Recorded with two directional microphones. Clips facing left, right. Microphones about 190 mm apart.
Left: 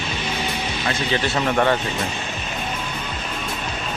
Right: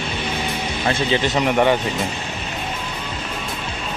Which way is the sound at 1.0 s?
15° right (ahead or behind).